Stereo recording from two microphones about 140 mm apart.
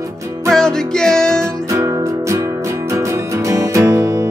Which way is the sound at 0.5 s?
5° left (ahead or behind).